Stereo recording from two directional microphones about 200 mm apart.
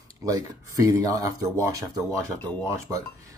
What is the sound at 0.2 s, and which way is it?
Speech, 15° right (ahead or behind).